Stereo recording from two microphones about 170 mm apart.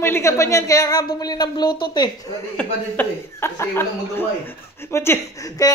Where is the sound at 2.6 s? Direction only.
10° left (ahead or behind).